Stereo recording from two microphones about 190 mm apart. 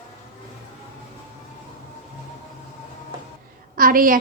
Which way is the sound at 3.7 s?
50° right (ahead or behind).